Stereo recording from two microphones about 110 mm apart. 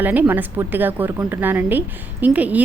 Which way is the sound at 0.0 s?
15° right (ahead or behind).